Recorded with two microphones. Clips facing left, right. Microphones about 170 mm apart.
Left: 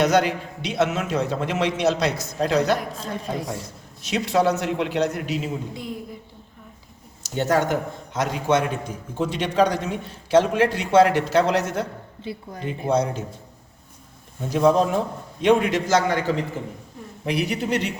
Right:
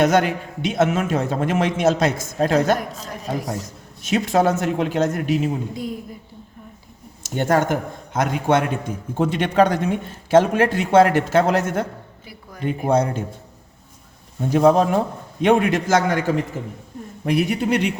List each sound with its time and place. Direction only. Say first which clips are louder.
0.0 s a man's voice: right 2 dB; 50° right (ahead or behind)
4.0 s a man's voice: right 2 dB; 50° right (ahead or behind)
7.2 s a man's voice: right 2 dB; 55° right (ahead or behind)
12.2 s a woman's voice: left 7 dB; 25° left (ahead or behind)
12.6 s speech: right 3 dB; 55° right (ahead or behind)
14.5 s a man's voice: right 3 dB; 55° right (ahead or behind)